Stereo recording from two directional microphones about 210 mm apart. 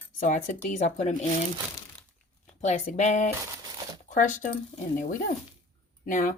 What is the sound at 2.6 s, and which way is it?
Speech, 35° left (ahead or behind).